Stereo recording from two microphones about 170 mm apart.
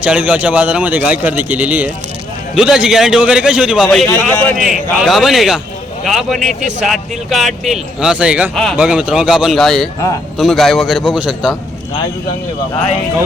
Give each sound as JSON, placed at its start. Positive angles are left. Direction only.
{"t": 0.0, "sound": "a man's voice", "side_deg": -5}
{"t": 4.1, "sound": "a man's voice", "side_deg": 10}
{"t": 4.5, "sound": "a man's voice", "side_deg": -5}